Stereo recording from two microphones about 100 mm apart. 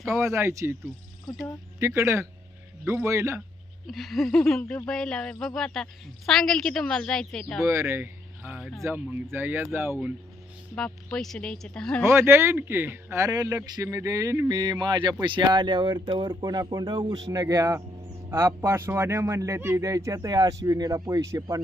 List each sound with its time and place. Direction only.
0.2 s speech: 30° right (ahead or behind)
1.3 s a woman's voice: centre (ahead or behind)
1.8 s speech: 25° right (ahead or behind)
3.8 s a woman's voice: centre (ahead or behind)
7.6 s speech: 30° right (ahead or behind)
10.8 s speech: 5° left (ahead or behind)
12.0 s speech: 25° right (ahead or behind)
14.5 s speech: 50° right (ahead or behind); by 21.4 s 35° right (ahead or behind)